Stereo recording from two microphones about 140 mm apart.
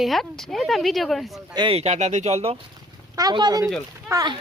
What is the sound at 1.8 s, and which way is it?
Speech, 55° right (ahead or behind).